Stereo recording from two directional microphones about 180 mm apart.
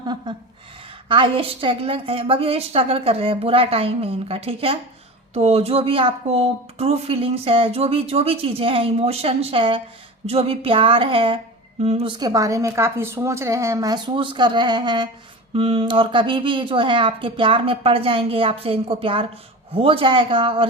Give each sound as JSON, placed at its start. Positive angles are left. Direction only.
{"t": 0.0, "sound": "a woman's voice", "side_deg": -25}
{"t": 12.2, "sound": "a woman's voice", "side_deg": -20}